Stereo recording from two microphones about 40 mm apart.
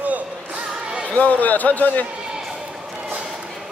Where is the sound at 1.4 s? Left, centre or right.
Left.